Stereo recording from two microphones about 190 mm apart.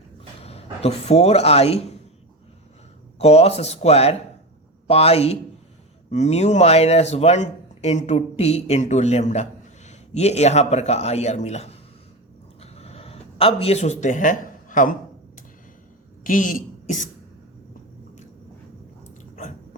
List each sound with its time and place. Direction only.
0.4 s speech: 30° left (ahead or behind)
3.2 s speech: 35° left (ahead or behind)
12.7 s a sound: 35° left (ahead or behind)
16.2 s a woman's voice: 45° left (ahead or behind)